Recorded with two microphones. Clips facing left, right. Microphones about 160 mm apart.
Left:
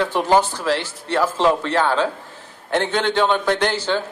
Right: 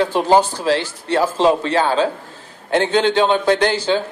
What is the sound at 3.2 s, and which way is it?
Speech, 15° right (ahead or behind).